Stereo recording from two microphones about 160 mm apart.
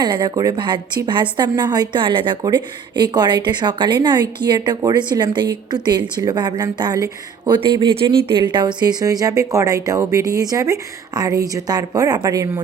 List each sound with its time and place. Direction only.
0.0 s speech: 25° right (ahead or behind)